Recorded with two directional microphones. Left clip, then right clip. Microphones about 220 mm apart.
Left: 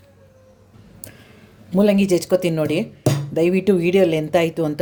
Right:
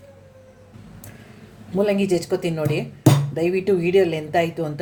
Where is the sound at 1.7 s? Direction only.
45° left (ahead or behind).